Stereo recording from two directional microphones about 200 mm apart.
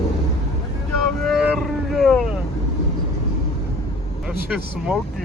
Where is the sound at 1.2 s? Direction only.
Centre (ahead or behind).